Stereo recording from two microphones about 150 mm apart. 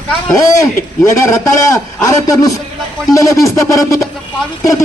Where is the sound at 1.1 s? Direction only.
20° left (ahead or behind).